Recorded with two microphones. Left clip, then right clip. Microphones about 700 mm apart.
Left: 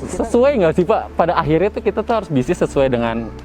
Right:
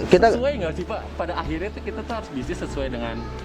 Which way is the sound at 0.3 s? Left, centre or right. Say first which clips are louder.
Left 11 dB; left.